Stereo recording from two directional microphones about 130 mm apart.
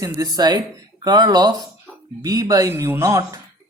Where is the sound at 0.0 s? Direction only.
30° right (ahead or behind).